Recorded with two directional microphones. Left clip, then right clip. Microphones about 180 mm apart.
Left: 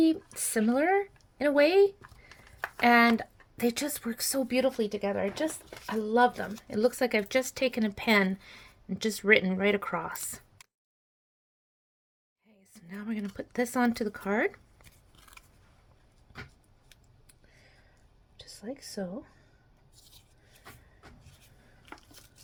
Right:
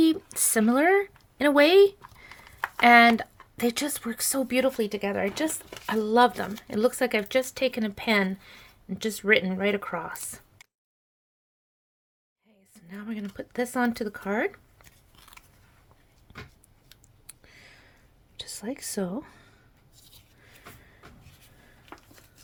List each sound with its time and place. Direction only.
0.0 s speech: 20° right (ahead or behind); by 10.4 s 5° left (ahead or behind)
12.7 s speech: 10° left (ahead or behind)
15.1 s scissors: 10° right (ahead or behind)
17.2 s a sound: 35° right (ahead or behind)
18.3 s speech: 40° right (ahead or behind)